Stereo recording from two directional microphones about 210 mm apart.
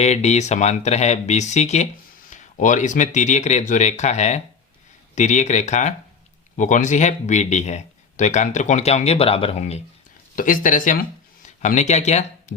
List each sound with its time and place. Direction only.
0.0 s speech: 30° left (ahead or behind)
10.3 s speech: 40° left (ahead or behind)